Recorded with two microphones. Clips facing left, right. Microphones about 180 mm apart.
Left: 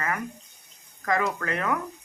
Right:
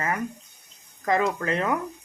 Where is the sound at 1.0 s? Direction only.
25° right (ahead or behind).